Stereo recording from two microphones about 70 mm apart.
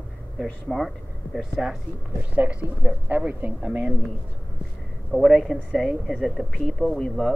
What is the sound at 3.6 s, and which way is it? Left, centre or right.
Speech, centre.